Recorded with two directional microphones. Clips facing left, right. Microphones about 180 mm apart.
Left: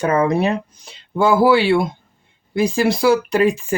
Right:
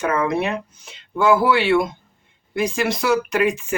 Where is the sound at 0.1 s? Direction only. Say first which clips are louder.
Left 6 dB; 35° left (ahead or behind).